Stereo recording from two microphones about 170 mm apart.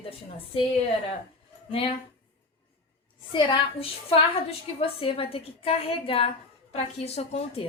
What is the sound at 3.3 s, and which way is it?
A woman's voice, 30° left (ahead or behind).